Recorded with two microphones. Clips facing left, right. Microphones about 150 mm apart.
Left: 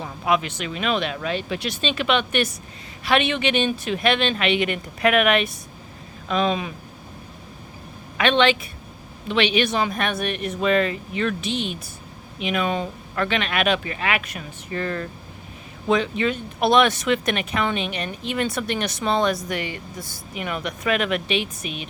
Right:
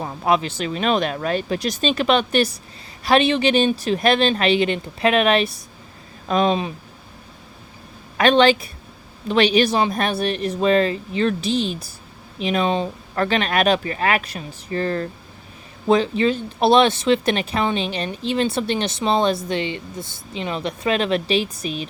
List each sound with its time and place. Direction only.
0.0 s speech: 35° right (ahead or behind)
8.2 s speech: 40° right (ahead or behind)